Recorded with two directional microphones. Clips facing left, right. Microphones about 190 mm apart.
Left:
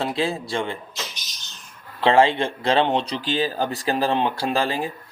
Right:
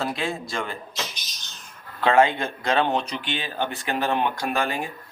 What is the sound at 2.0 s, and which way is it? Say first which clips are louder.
Speech: left 2 dB; 30° left (ahead or behind).